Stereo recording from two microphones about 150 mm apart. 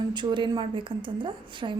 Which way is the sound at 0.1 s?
30° right (ahead or behind).